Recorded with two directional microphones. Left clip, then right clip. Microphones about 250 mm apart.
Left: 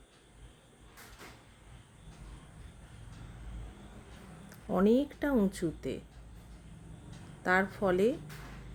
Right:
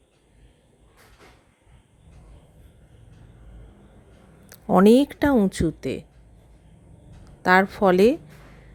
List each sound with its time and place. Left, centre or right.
4.4 s speech: right
7.4 s a woman's voice: right